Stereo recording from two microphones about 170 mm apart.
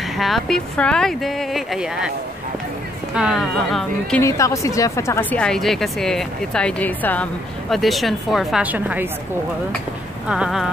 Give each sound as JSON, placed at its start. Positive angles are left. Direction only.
{"t": 0.2, "sound": "speech", "side_deg": 0}
{"t": 3.2, "sound": "speech", "side_deg": -5}
{"t": 4.2, "sound": "a woman's voice", "side_deg": 20}
{"t": 5.4, "sound": "speech", "side_deg": 0}
{"t": 10.2, "sound": "speech", "side_deg": -5}